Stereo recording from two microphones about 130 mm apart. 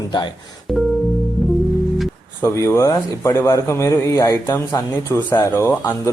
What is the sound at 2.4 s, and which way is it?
A man's voice, 20° left (ahead or behind).